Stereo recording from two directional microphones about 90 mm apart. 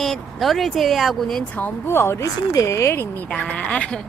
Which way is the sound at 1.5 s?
25° left (ahead or behind).